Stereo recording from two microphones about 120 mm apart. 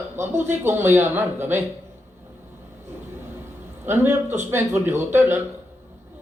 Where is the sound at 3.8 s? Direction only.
20° right (ahead or behind).